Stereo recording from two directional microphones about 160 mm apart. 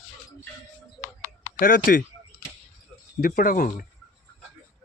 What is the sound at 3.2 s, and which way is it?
Speech, 60° left (ahead or behind).